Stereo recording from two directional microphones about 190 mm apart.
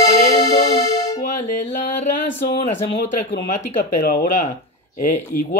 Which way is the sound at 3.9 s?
50° left (ahead or behind).